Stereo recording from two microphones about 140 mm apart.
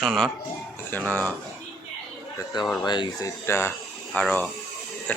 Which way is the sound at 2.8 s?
35° left (ahead or behind).